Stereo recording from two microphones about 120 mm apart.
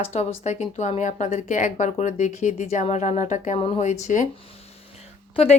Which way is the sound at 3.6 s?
55° left (ahead or behind).